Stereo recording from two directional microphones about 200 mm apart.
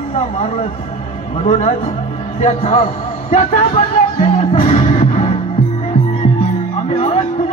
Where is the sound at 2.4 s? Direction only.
35° left (ahead or behind).